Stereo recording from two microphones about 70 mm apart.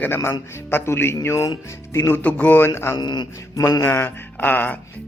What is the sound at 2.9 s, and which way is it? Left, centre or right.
Speech, left.